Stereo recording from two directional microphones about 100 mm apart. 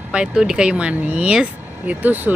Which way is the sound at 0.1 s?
5° right (ahead or behind).